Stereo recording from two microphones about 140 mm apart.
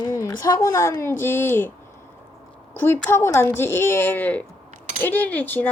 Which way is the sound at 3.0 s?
20° left (ahead or behind).